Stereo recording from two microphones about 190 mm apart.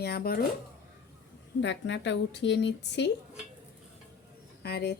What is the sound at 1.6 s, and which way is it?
A woman's voice, 70° left (ahead or behind).